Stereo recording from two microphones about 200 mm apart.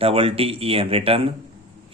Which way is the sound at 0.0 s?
30° right (ahead or behind).